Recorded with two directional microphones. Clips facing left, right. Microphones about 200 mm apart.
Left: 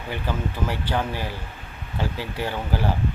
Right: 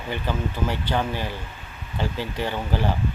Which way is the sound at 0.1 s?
10° left (ahead or behind).